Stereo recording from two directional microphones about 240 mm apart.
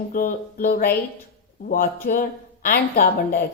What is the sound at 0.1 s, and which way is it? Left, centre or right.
A woman's voice, left.